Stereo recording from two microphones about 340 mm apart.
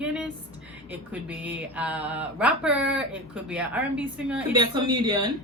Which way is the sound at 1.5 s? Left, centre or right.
Centre.